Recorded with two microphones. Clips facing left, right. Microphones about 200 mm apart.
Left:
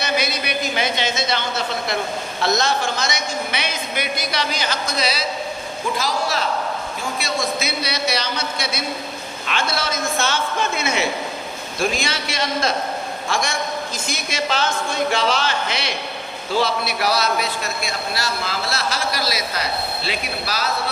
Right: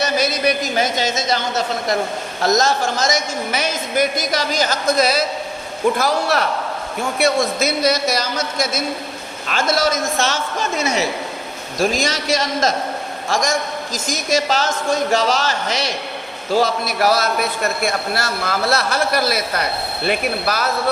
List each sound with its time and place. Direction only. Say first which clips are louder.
0.0 s a man's voice: right 5 dB; 40° right (ahead or behind)
6.0 s a man's voice: right 4 dB; 60° right (ahead or behind)